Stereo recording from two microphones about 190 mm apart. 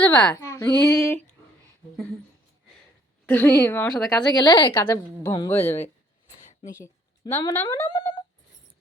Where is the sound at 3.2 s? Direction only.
10° left (ahead or behind).